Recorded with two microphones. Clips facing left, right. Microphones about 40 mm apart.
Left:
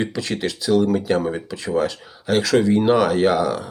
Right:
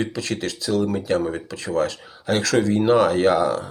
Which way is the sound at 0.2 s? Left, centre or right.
Left.